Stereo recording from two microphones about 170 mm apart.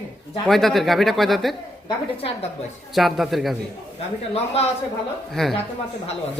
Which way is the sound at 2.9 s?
Centre (ahead or behind).